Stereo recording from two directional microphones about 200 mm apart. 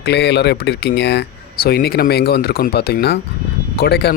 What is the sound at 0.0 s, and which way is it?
Speech, 55° left (ahead or behind).